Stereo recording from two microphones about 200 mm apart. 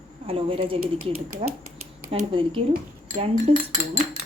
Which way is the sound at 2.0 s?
25° right (ahead or behind).